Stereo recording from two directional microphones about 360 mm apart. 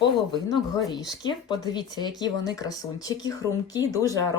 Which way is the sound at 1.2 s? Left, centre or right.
Centre.